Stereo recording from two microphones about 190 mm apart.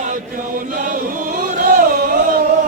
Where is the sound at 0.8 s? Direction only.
45° right (ahead or behind).